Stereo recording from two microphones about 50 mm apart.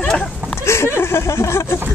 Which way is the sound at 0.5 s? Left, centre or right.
Left.